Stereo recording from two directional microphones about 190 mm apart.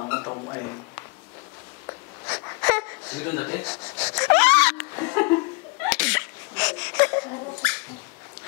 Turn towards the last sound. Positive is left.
turn(degrees=10)  # may be behind; listen again after turning